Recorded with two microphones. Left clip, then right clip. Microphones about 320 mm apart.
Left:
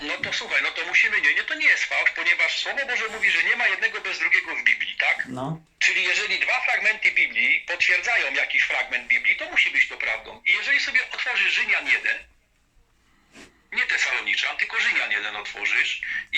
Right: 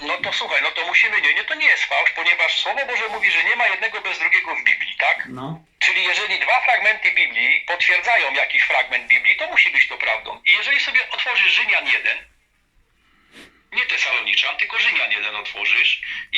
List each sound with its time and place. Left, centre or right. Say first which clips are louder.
0.0 s speech: right 5 dB; centre
13.7 s speech: right 3 dB; centre